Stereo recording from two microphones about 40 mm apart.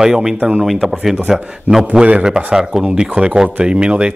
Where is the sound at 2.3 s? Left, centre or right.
Centre.